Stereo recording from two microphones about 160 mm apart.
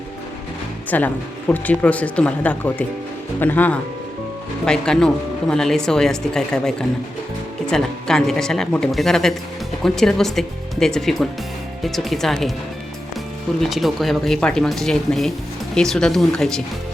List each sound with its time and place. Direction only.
0.9 s speech: 10° left (ahead or behind)
13.7 s speech: centre (ahead or behind)